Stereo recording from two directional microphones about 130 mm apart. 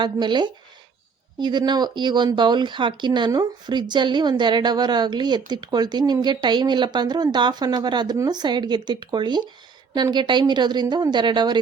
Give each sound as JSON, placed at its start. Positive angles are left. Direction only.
{"t": 0.0, "sound": "speech", "side_deg": -35}